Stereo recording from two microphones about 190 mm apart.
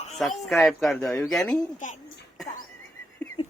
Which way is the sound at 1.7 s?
40° left (ahead or behind).